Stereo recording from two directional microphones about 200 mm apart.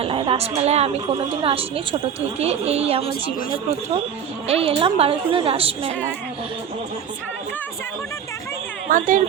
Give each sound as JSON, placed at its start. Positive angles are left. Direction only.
{"t": 0.0, "sound": "a woman's voice", "side_deg": -25}
{"t": 4.4, "sound": "a woman's voice", "side_deg": -30}
{"t": 8.9, "sound": "a woman's voice", "side_deg": -40}